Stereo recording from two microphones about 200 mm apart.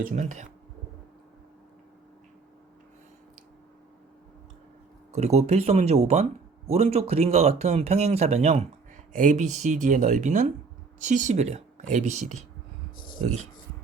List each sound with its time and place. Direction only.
0.0 s speech: 40° right (ahead or behind)
5.1 s speech: 35° right (ahead or behind)